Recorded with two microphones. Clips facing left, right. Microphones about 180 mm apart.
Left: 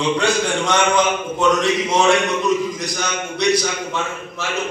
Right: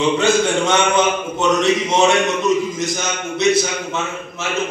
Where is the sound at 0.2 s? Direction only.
25° right (ahead or behind).